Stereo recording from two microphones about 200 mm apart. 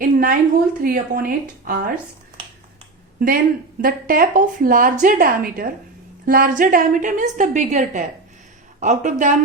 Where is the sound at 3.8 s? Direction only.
45° right (ahead or behind).